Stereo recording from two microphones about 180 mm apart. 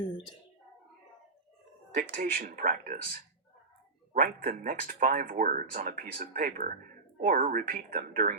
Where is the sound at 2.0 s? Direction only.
50° right (ahead or behind).